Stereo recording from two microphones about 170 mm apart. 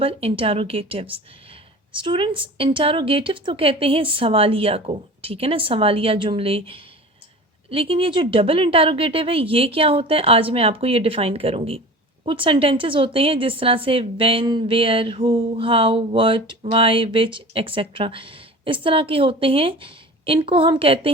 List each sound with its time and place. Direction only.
0.0 s a woman's voice: 35° right (ahead or behind)